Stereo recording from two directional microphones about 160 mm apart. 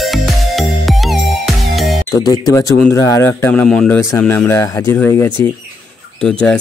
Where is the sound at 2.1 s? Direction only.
25° left (ahead or behind).